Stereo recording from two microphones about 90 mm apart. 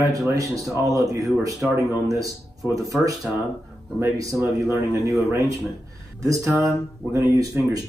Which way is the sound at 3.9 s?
35° right (ahead or behind).